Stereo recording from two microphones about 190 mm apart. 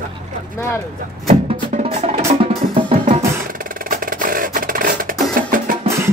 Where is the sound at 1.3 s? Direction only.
40° right (ahead or behind).